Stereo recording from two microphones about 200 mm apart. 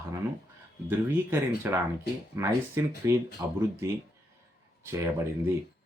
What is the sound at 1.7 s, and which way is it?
Speech, 10° right (ahead or behind).